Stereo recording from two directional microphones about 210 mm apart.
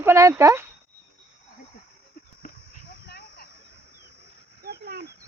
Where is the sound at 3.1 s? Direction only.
50° left (ahead or behind).